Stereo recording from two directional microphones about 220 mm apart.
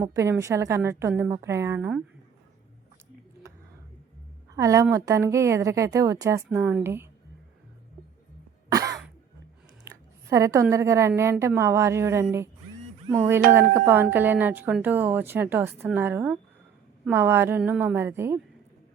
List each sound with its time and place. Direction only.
0.0 s a woman's voice: 15° right (ahead or behind)
4.5 s a woman's voice: 15° right (ahead or behind)
8.7 s cough: 15° right (ahead or behind)
10.2 s a woman's voice: 15° right (ahead or behind)